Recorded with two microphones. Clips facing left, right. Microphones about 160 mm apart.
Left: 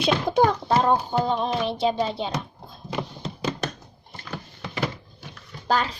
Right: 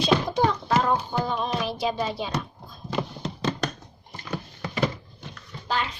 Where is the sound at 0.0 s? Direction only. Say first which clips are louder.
Left 2 dB; 60° left (ahead or behind).